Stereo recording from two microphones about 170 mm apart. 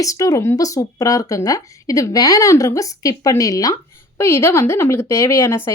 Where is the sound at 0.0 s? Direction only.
20° left (ahead or behind).